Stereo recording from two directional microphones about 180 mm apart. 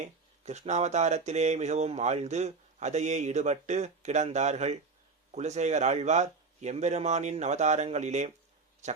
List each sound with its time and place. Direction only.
0.0 s a man's voice: 40° right (ahead or behind)